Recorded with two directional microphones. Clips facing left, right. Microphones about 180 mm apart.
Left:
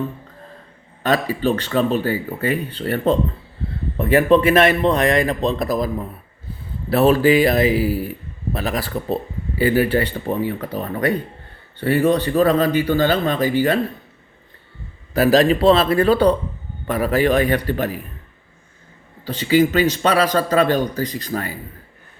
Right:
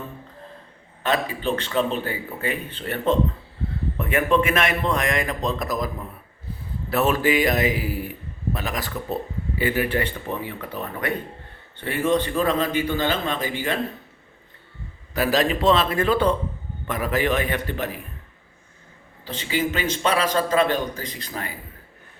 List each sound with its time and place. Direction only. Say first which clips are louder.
1.0 s speech: left 5 dB; 40° left (ahead or behind)
6.9 s speech: left 6 dB; 35° left (ahead or behind)
15.1 s speech: left 7 dB; 35° left (ahead or behind)
19.2 s speech: left 9 dB; 40° left (ahead or behind)